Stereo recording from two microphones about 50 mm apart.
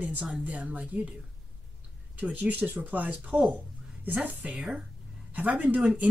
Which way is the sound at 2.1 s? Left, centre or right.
Right.